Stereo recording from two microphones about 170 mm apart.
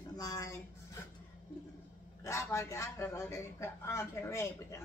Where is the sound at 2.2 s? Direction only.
15° left (ahead or behind).